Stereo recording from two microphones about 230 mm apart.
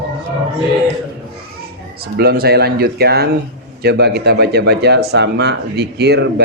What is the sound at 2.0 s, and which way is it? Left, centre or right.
Speech, right.